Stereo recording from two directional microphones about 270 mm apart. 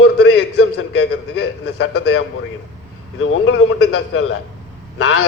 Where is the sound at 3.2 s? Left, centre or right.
Left.